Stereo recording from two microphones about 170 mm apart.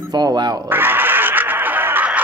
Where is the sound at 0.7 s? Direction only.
10° right (ahead or behind).